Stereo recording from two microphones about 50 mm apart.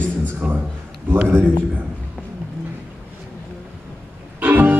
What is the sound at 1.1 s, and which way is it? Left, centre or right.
Speech, right.